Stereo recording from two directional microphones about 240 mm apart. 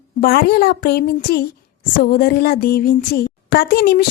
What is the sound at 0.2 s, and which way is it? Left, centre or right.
A woman's voice, left.